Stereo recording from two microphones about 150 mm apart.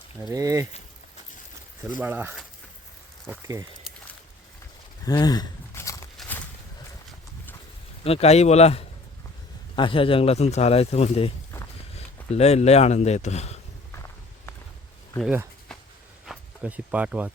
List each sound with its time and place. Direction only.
0.2 s speech: 25° right (ahead or behind)
2.0 s speech: 10° right (ahead or behind)
5.0 s a sound: 25° left (ahead or behind)
8.0 s speech: 45° left (ahead or behind)
16.2 s speech: 5° right (ahead or behind)